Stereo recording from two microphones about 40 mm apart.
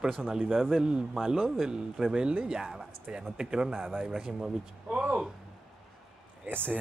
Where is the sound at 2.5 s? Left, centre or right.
Centre.